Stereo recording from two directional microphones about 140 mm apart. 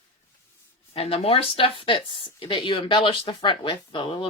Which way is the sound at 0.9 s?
45° left (ahead or behind).